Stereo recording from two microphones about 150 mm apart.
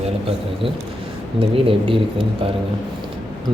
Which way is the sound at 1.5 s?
35° right (ahead or behind).